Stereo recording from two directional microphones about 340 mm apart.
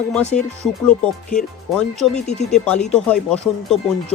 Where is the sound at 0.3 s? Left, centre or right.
Left.